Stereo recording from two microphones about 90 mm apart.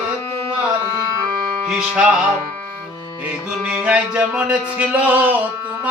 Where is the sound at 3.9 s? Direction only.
15° right (ahead or behind).